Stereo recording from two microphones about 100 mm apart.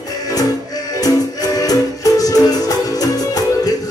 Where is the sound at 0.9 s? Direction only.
40° left (ahead or behind).